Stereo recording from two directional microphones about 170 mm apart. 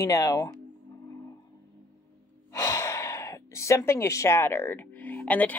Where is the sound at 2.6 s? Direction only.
15° left (ahead or behind).